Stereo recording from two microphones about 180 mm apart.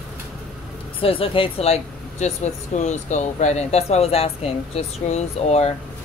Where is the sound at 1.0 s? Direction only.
30° left (ahead or behind).